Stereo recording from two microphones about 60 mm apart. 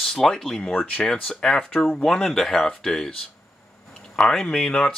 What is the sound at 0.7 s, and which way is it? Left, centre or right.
Speech, centre.